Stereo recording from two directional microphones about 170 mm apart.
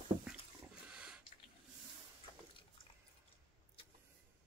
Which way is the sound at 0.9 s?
5° right (ahead or behind).